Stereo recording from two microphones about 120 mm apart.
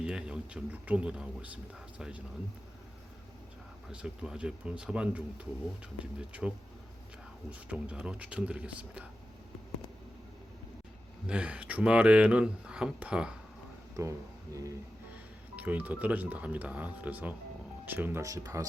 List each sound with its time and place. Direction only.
0.0 s speech: 5° right (ahead or behind)
3.8 s speech: 5° right (ahead or behind)
7.7 s speech: 10° right (ahead or behind)
11.3 s speech: 10° right (ahead or behind)
13.9 s speech: 25° right (ahead or behind)
15.5 s speech: 15° right (ahead or behind)
18.2 s speech: 30° right (ahead or behind)